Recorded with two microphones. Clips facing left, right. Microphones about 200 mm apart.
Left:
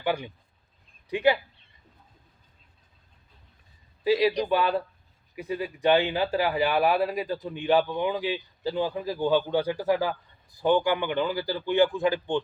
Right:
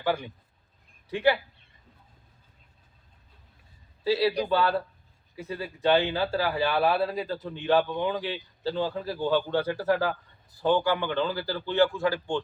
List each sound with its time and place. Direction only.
0.0 s a man's voice: 15° left (ahead or behind)
4.4 s a man's voice: 15° left (ahead or behind)